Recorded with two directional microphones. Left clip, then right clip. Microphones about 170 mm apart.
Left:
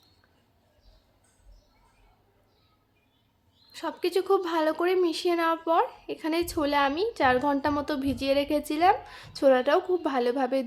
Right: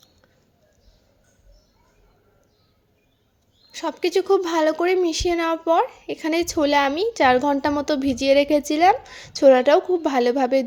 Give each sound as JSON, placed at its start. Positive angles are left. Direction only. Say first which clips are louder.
{"t": 3.7, "sound": "a woman's voice", "louder": "right 6 dB", "side_deg": -25}